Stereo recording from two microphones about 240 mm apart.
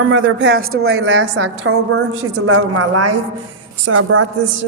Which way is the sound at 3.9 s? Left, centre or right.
Right.